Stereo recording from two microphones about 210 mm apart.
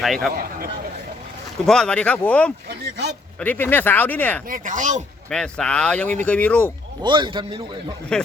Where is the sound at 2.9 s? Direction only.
50° right (ahead or behind).